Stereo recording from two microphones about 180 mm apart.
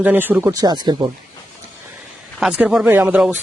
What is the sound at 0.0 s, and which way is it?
Speech, 10° right (ahead or behind).